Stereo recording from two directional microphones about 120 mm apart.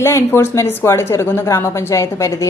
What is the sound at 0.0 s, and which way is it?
A woman's voice, 20° left (ahead or behind).